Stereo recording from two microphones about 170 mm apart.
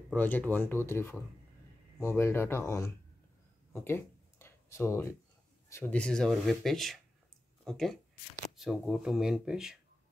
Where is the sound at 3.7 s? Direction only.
15° left (ahead or behind).